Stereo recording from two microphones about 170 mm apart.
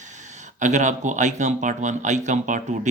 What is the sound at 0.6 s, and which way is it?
Speech, 45° right (ahead or behind).